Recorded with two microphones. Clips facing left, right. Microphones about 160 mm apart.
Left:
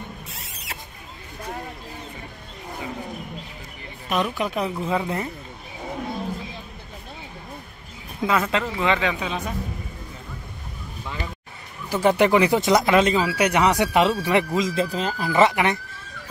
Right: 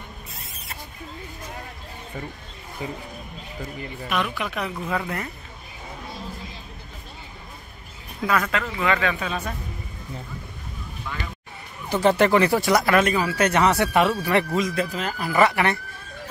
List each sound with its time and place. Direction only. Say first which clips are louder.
0.3 s rodents: left 2 dB; 75° left (ahead or behind)
4.1 s speech: left 3 dB; 35° left (ahead or behind)
4.7 s speech: left 3 dB; 15° left (ahead or behind)
8.2 s speech: left 2 dB; 20° left (ahead or behind)
11.9 s speech: even; 10° left (ahead or behind)